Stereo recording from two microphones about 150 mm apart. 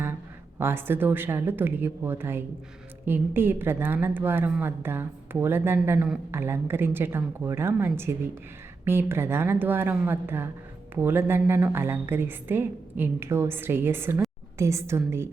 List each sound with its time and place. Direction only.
0.6 s a woman's voice: 15° right (ahead or behind)